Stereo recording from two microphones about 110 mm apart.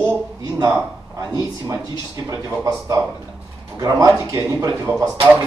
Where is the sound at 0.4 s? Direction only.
35° right (ahead or behind).